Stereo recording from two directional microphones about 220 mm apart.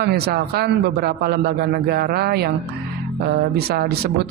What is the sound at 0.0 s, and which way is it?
Speech, 50° right (ahead or behind).